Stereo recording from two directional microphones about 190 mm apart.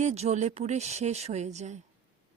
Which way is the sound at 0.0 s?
35° right (ahead or behind).